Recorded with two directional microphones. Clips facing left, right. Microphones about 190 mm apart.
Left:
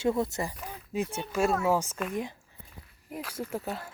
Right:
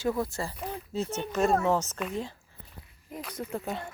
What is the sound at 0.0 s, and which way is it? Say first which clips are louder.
Speech: left 2 dB; 25° left (ahead or behind).